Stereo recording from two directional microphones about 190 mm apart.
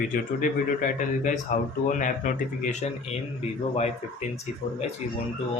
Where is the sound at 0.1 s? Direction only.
40° left (ahead or behind).